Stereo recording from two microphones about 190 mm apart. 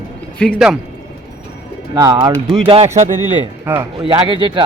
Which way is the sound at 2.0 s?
20° right (ahead or behind).